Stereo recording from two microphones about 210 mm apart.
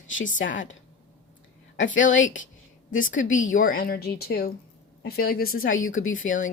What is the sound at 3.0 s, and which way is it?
Speech, 35° left (ahead or behind).